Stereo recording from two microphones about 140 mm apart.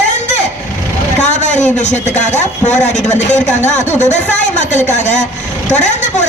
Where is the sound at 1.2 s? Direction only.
55° left (ahead or behind).